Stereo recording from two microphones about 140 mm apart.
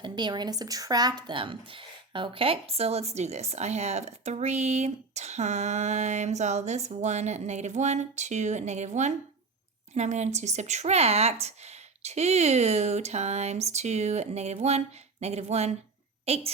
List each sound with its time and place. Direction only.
0.0 s a woman's voice: 30° right (ahead or behind); by 16.5 s 45° right (ahead or behind)